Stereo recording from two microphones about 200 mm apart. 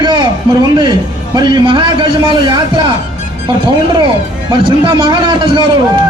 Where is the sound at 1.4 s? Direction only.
20° right (ahead or behind).